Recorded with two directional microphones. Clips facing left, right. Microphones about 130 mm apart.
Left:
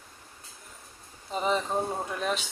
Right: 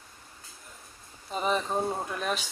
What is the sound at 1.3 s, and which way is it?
Speech, 20° left (ahead or behind).